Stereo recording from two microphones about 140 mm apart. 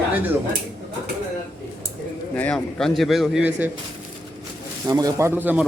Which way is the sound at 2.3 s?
10° left (ahead or behind).